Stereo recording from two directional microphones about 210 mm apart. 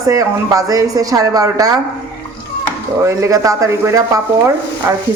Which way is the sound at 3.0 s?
15° right (ahead or behind).